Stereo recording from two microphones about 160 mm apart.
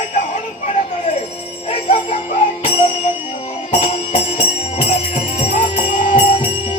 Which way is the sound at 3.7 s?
35° left (ahead or behind).